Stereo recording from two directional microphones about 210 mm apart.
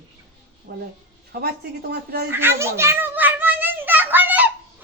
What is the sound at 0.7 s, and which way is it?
Speech, 50° right (ahead or behind).